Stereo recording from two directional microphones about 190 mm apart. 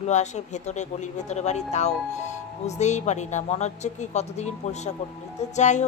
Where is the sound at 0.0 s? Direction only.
35° left (ahead or behind).